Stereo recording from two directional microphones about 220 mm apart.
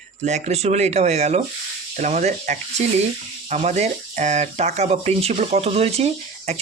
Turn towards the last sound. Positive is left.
turn(degrees=-30)  # may be behind; listen again after turning